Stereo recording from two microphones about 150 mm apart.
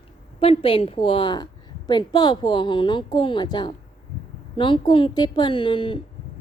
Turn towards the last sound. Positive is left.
turn(degrees=35)  # may be behind; listen again after turning